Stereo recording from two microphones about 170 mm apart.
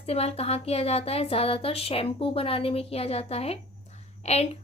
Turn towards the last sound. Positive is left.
turn(degrees=40)  # may be behind; listen again after turning